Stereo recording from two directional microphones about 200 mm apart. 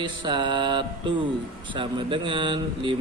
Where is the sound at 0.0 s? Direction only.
25° right (ahead or behind).